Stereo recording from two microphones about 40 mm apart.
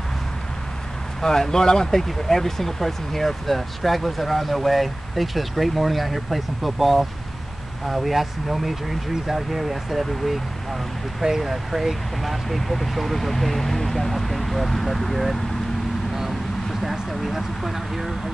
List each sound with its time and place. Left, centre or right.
1.2 s speech: centre
17.1 s speech: centre